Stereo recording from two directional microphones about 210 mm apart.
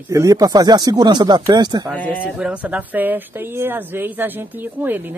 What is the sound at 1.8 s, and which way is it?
Speech, 5° left (ahead or behind).